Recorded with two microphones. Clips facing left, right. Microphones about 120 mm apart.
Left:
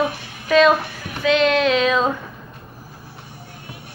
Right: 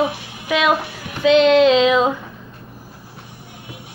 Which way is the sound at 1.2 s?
25° right (ahead or behind).